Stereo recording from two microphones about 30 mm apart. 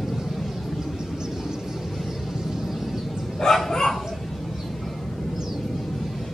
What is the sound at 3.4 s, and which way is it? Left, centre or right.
Bow-wow, centre.